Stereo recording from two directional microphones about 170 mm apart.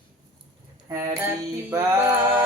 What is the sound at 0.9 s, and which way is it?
Speech, 15° right (ahead or behind).